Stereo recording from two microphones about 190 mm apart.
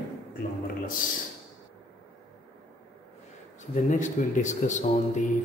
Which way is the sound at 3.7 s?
40° left (ahead or behind).